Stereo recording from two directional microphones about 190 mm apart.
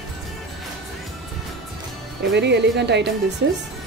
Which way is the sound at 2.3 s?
65° right (ahead or behind).